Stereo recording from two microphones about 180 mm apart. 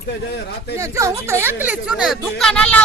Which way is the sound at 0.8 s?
15° right (ahead or behind).